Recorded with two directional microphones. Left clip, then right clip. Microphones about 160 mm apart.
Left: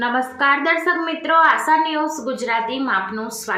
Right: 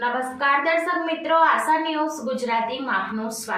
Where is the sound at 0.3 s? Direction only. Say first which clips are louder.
Left 3 dB; 35° left (ahead or behind).